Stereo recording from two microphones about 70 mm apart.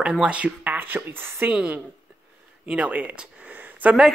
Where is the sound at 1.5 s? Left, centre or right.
Centre.